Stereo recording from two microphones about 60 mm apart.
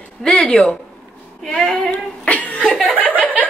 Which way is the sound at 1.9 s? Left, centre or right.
Left.